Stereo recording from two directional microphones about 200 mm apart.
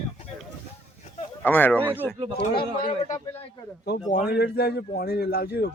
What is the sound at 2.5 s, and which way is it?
Speech, 50° left (ahead or behind).